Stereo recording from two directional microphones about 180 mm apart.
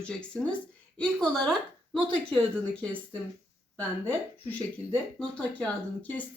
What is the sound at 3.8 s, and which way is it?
Speech, 10° left (ahead or behind).